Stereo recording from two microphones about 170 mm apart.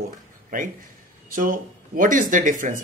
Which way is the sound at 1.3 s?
55° right (ahead or behind).